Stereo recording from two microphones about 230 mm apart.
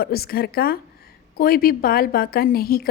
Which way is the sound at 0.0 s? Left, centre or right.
Left.